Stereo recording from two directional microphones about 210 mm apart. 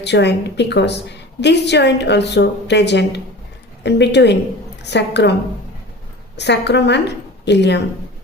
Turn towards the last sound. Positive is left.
turn(degrees=55)  # may be behind; listen again after turning